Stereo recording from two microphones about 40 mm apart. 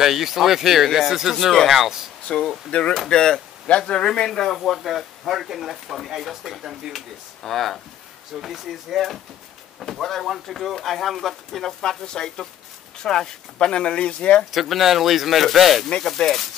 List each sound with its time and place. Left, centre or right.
0.0 s speech: centre
2.3 s speech: left
2.7 s speech: left
3.1 s speech: centre
4.3 s speech: centre
7.4 s speech: centre
11.8 s speech: centre
14.5 s speech: centre
16.0 s speech: centre